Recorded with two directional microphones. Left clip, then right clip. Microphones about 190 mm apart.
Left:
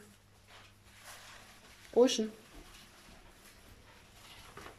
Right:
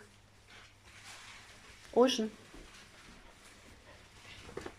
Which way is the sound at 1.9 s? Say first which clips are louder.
Left 1 dB; 20° left (ahead or behind).